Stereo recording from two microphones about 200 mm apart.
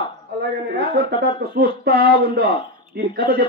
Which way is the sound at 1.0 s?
50° right (ahead or behind).